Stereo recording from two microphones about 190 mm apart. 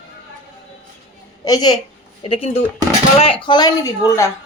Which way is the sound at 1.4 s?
20° left (ahead or behind).